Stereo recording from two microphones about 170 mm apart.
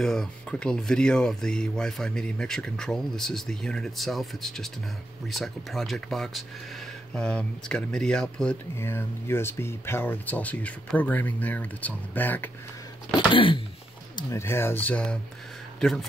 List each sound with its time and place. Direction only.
0.0 s speech: 5° left (ahead or behind)
13.1 s a sound: 30° left (ahead or behind)
14.1 s speech: 15° left (ahead or behind)